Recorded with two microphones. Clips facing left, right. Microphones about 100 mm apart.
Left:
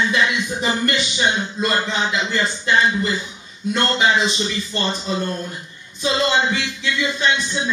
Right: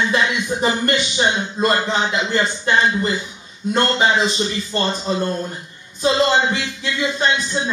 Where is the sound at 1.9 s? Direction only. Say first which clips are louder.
Right 2 dB; 40° right (ahead or behind).